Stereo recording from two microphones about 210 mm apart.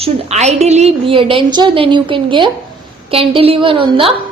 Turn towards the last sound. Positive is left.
turn(degrees=-25)  # may be behind; listen again after turning